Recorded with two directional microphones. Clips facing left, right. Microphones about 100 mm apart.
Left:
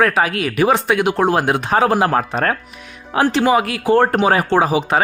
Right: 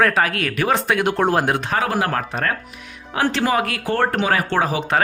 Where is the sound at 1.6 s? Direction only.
25° left (ahead or behind).